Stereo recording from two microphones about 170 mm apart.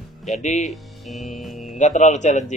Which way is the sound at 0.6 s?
Centre (ahead or behind).